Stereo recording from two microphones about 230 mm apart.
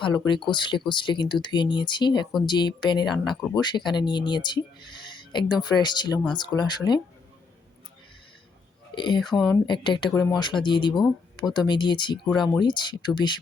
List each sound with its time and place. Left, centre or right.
0.0 s speech: left
9.0 s speech: centre